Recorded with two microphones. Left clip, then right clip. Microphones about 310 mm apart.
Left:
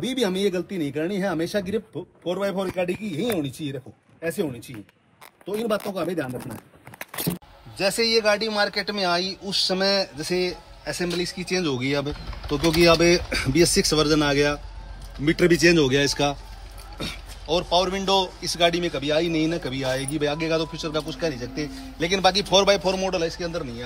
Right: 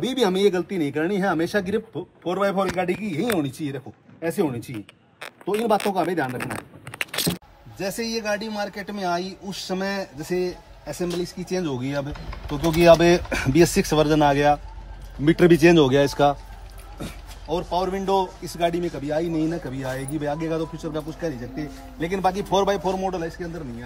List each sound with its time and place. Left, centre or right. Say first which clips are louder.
0.0 s speech: right 4 dB; centre
5.5 s speech: right 4 dB; centre
7.8 s a man's voice: left 7 dB; centre
17.0 s a man's voice: left 4 dB; centre